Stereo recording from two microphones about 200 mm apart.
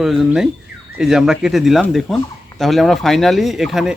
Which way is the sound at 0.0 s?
Centre (ahead or behind).